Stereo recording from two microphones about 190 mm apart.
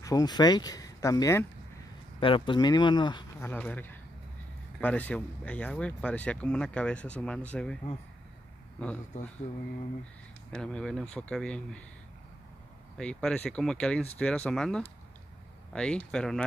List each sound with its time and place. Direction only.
0.0 s speech: 20° left (ahead or behind)
2.1 s speech: 25° left (ahead or behind)
3.3 s speech: 10° left (ahead or behind)
8.8 s speech: 5° left (ahead or behind)
10.5 s speech: 5° left (ahead or behind)
12.9 s speech: 5° left (ahead or behind)